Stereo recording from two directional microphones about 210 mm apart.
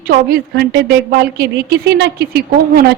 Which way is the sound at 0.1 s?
45° right (ahead or behind).